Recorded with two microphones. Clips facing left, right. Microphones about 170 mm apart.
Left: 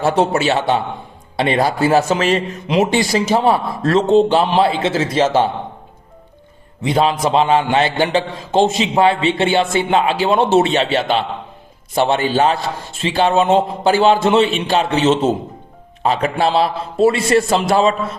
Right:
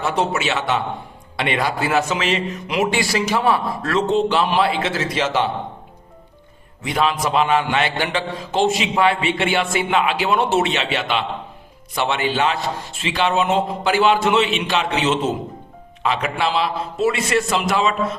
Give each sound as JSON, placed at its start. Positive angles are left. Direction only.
{"t": 0.0, "sound": "a man's voice", "side_deg": 35}
{"t": 2.6, "sound": "a man's voice", "side_deg": 25}
{"t": 6.8, "sound": "a man's voice", "side_deg": 30}